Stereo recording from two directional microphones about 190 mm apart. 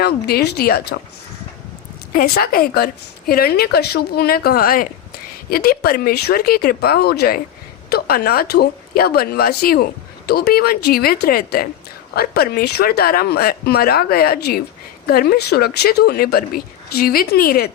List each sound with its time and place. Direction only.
0.0 s speech: 55° left (ahead or behind)
2.1 s a woman's voice: 50° left (ahead or behind)